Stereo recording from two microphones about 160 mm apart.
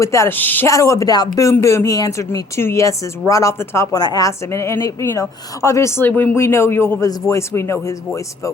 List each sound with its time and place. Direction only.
0.0 s speech: 20° left (ahead or behind)